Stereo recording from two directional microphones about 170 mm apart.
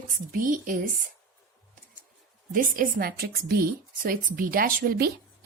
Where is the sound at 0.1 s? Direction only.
50° right (ahead or behind).